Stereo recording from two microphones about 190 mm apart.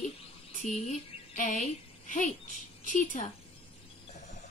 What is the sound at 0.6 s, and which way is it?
A woman's voice, 45° left (ahead or behind).